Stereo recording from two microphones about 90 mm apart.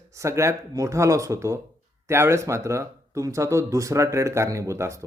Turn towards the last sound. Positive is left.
turn(degrees=-30)  # may be behind; listen again after turning